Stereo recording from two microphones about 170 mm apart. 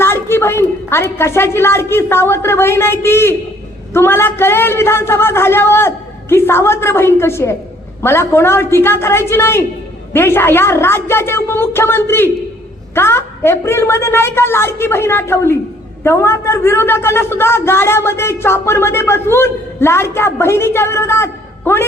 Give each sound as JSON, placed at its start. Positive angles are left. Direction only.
{"t": 0.0, "sound": "a man's voice", "side_deg": 15}